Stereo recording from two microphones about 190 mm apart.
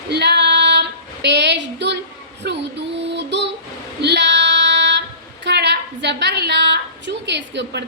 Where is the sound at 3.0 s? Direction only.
65° right (ahead or behind).